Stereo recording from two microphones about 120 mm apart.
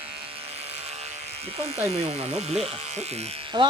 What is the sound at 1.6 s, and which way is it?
Speech, 55° right (ahead or behind).